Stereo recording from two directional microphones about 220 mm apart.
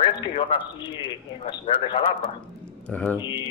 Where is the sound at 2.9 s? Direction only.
5° left (ahead or behind).